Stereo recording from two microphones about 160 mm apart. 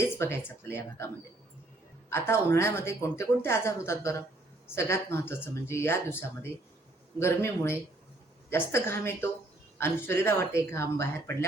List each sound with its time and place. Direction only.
0.0 s speech: 15° left (ahead or behind)